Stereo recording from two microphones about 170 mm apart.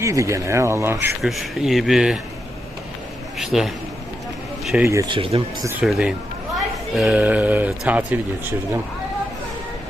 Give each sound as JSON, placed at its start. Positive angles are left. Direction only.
{"t": 0.0, "sound": "speech", "side_deg": -15}
{"t": 1.2, "sound": "speech", "side_deg": 0}
{"t": 3.3, "sound": "speech", "side_deg": 0}
{"t": 4.9, "sound": "speech", "side_deg": -20}
{"t": 5.1, "sound": "speech", "side_deg": -30}
{"t": 5.8, "sound": "speech", "side_deg": -5}